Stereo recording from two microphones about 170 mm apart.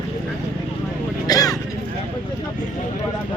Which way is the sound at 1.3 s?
20° left (ahead or behind).